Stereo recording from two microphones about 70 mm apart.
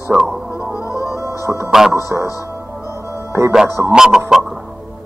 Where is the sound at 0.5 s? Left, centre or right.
Right.